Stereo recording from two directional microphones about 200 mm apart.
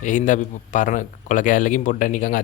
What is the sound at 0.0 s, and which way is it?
A man's voice, 40° left (ahead or behind).